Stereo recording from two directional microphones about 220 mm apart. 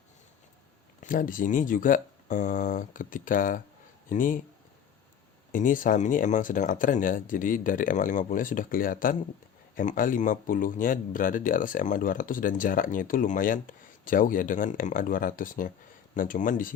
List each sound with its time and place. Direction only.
1.0 s speech: 40° left (ahead or behind)
5.5 s speech: 35° left (ahead or behind)